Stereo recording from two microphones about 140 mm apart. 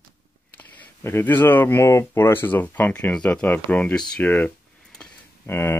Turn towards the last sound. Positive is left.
turn(degrees=20)  # may be behind; listen again after turning